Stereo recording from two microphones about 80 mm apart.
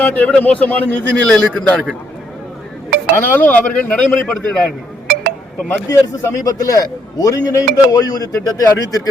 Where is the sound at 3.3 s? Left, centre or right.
Left.